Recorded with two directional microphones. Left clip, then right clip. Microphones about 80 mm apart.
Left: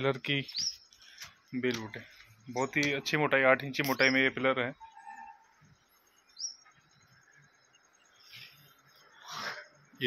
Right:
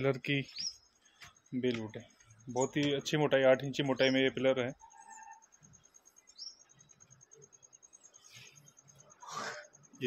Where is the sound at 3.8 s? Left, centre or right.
Right.